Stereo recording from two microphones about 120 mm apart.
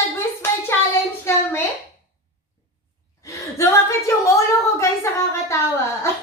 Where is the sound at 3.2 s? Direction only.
25° left (ahead or behind).